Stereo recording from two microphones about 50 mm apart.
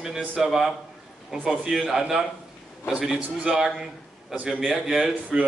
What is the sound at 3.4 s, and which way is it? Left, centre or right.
A man's voice, centre.